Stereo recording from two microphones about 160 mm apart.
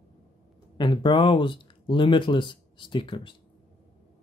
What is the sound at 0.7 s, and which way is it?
Speech, 30° left (ahead or behind).